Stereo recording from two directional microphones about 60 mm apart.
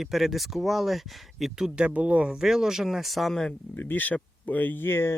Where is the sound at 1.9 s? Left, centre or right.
Right; by 3.4 s centre.